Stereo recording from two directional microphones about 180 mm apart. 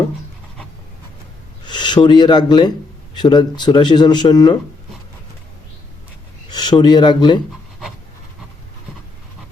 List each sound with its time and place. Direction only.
1.6 s speech: 25° left (ahead or behind)
6.5 s speech: 25° left (ahead or behind)